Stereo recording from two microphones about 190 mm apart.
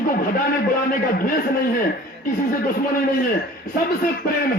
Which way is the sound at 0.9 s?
50° left (ahead or behind).